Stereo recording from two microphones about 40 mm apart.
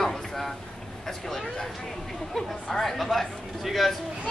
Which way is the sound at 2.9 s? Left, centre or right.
Centre.